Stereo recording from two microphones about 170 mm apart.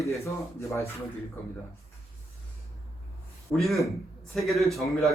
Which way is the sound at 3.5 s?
Centre (ahead or behind).